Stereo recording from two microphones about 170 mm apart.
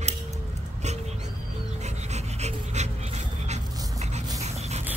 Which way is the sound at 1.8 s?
40° right (ahead or behind).